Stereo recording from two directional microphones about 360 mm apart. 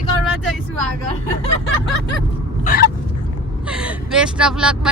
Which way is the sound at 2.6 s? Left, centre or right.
Left.